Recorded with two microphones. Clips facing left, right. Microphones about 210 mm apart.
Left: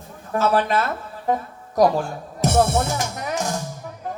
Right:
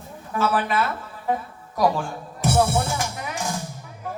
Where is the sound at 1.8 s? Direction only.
40° left (ahead or behind).